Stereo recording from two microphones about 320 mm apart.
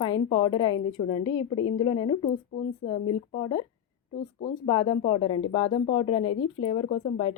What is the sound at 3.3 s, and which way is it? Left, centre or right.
A woman's voice, centre.